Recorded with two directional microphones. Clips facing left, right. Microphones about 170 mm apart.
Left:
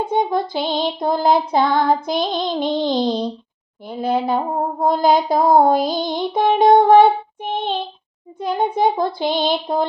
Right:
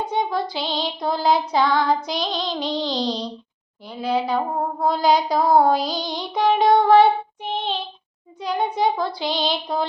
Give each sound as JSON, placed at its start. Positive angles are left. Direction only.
{"t": 0.0, "sound": "child singing", "side_deg": 50}